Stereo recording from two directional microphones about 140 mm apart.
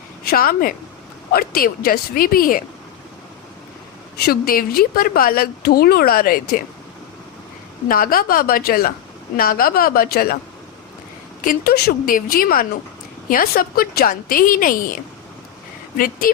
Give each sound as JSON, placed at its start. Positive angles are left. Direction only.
{"t": 0.3, "sound": "speech", "side_deg": 90}
{"t": 4.3, "sound": "speech", "side_deg": 90}
{"t": 7.9, "sound": "speech", "side_deg": 90}
{"t": 11.4, "sound": "speech", "side_deg": 90}
{"t": 16.0, "sound": "speech", "side_deg": 90}